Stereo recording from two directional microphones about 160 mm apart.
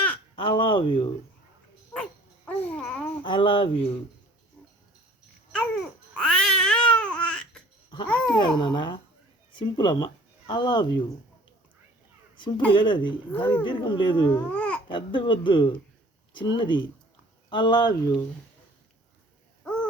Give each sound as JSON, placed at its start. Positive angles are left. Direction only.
{"t": 0.3, "sound": "a sound", "side_deg": 30}
{"t": 2.5, "sound": "babbling", "side_deg": 10}
{"t": 3.2, "sound": "speech", "side_deg": 30}
{"t": 5.5, "sound": "babbling", "side_deg": 5}
{"t": 8.0, "sound": "speech", "side_deg": 5}
{"t": 8.5, "sound": "speech", "side_deg": 30}
{"t": 12.4, "sound": "speech", "side_deg": 30}
{"t": 14.5, "sound": "babbling", "side_deg": 10}
{"t": 14.8, "sound": "speech", "side_deg": 30}
{"t": 19.6, "sound": "owl", "side_deg": 5}